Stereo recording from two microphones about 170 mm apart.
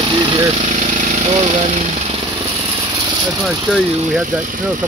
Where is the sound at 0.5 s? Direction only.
45° right (ahead or behind).